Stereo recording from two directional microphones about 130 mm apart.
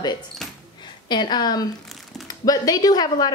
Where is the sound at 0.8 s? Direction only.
35° left (ahead or behind).